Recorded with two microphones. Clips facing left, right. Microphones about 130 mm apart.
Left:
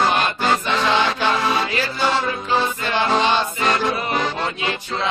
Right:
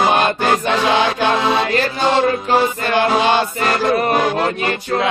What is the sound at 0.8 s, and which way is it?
Music, 15° right (ahead or behind).